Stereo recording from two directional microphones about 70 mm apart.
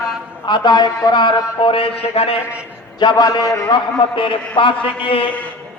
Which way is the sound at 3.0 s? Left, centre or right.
Left.